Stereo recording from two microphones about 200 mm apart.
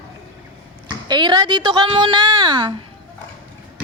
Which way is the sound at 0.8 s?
20° right (ahead or behind).